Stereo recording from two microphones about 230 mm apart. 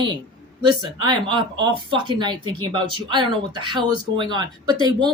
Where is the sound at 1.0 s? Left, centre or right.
Centre.